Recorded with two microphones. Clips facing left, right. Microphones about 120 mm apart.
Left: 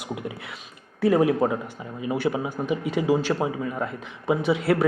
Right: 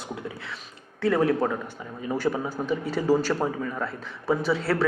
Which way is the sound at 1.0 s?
20° left (ahead or behind).